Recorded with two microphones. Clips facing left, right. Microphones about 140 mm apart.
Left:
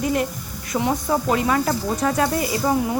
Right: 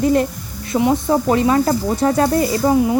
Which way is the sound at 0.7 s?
20° right (ahead or behind).